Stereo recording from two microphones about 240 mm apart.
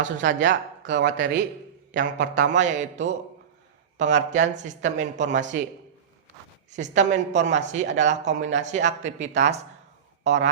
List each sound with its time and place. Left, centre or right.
0.0 s speech: right
2.5 s speech: right
6.7 s speech: right